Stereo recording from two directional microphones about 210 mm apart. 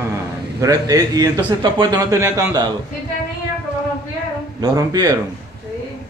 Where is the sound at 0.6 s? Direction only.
15° right (ahead or behind).